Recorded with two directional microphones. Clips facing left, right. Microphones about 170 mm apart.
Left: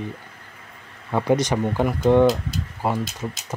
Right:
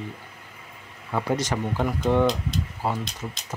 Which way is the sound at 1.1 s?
15° left (ahead or behind).